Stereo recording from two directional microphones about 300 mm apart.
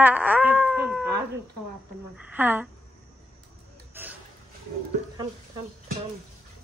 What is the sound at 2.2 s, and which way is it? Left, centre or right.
Female singing, centre.